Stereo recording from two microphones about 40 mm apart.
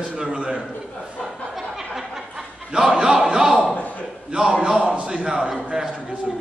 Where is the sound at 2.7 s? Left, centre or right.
Centre.